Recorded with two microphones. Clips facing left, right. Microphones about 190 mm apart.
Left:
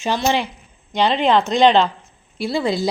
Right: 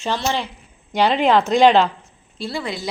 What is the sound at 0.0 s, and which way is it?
Speech, 15° left (ahead or behind).